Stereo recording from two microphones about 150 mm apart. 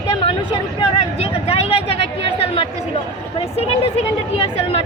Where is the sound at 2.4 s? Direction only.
40° left (ahead or behind).